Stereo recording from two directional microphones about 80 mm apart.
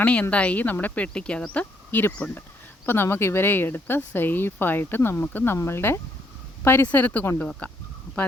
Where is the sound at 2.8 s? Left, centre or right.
Left.